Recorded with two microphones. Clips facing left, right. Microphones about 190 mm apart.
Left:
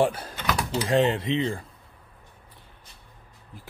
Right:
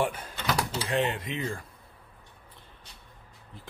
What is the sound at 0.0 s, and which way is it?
Speech, 35° left (ahead or behind).